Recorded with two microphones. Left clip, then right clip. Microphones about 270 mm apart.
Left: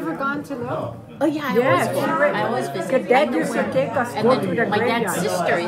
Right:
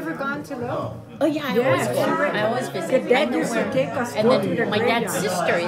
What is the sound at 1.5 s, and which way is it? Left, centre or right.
A woman's voice, centre.